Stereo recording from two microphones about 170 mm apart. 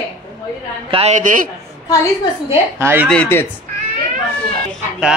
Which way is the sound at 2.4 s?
15° right (ahead or behind).